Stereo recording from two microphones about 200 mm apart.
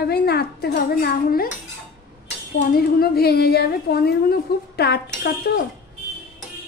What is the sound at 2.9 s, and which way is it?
A woman's voice, 50° left (ahead or behind).